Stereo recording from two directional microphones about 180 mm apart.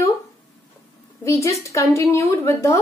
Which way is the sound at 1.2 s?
15° left (ahead or behind).